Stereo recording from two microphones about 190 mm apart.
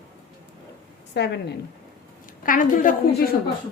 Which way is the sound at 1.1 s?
60° left (ahead or behind).